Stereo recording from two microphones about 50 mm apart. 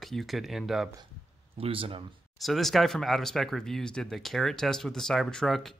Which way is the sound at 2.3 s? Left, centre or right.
Centre.